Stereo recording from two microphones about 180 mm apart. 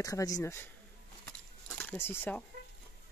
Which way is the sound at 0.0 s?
20° left (ahead or behind).